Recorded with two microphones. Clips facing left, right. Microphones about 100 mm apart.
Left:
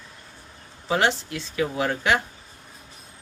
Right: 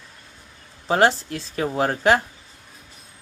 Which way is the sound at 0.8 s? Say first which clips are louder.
Right 4 dB; 40° right (ahead or behind).